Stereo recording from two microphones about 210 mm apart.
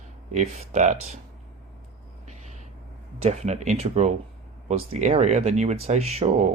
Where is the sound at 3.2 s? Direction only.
30° right (ahead or behind).